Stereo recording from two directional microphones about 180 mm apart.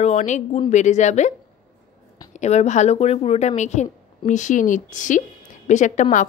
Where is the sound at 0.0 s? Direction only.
40° left (ahead or behind).